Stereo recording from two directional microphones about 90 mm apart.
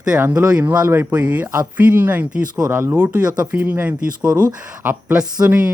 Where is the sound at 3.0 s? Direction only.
15° right (ahead or behind).